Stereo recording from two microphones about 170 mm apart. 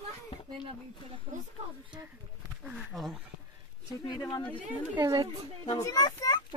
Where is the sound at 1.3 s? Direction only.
35° right (ahead or behind).